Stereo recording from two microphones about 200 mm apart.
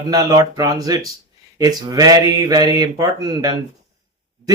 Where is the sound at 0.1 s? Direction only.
15° right (ahead or behind).